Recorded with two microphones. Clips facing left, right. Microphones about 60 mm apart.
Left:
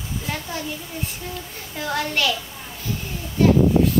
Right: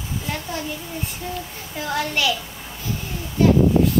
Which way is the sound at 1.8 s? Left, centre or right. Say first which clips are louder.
Even; centre.